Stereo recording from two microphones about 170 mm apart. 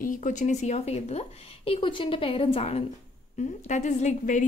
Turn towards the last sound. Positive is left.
turn(degrees=45)  # may be behind; listen again after turning